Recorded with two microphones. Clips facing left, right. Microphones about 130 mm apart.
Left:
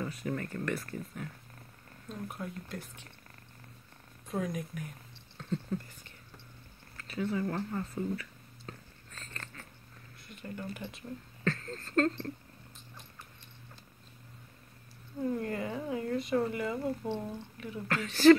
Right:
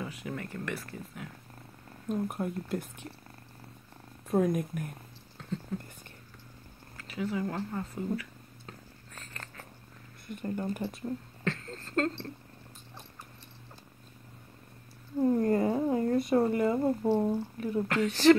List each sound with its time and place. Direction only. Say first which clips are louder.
0.0 s speech: left 2 dB; 10° right (ahead or behind)
2.0 s speech: right 8 dB; 55° right (ahead or behind)
4.3 s speech: right 8 dB; 55° right (ahead or behind)
7.1 s a sound: even; 10° right (ahead or behind)
10.4 s speech: right 7 dB; 40° right (ahead or behind)
11.4 s speech: left 2 dB; 20° right (ahead or behind)
15.1 s speech: right 8 dB; 35° right (ahead or behind)
17.8 s speech: right 6 dB; 20° right (ahead or behind)